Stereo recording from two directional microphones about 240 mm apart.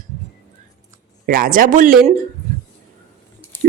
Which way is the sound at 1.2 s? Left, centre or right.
Right.